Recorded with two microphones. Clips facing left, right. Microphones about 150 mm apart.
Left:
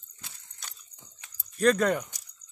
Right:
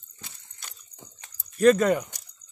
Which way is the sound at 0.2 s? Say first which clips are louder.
Right 1 dB; 5° right (ahead or behind).